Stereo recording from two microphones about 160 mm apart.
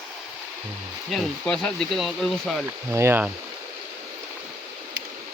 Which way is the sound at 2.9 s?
15° right (ahead or behind).